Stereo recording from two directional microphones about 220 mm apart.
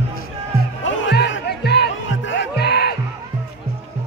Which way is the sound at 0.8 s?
55° left (ahead or behind).